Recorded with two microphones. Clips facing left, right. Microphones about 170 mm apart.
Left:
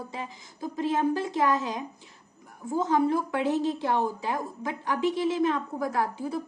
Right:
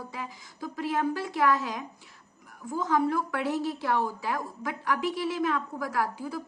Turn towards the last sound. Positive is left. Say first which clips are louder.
# left 2 dB
turn(degrees=25)  # may be behind; listen again after turning